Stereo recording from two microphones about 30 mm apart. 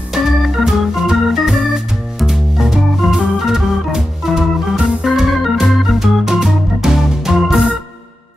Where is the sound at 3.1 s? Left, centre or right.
Centre.